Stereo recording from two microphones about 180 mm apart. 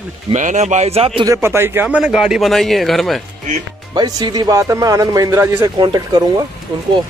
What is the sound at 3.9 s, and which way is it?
Speech, 20° right (ahead or behind).